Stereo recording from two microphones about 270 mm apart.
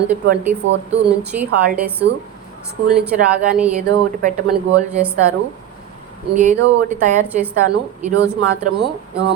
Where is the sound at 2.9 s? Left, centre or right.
Centre.